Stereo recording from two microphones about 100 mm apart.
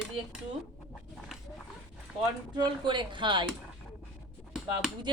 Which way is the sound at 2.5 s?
50° right (ahead or behind).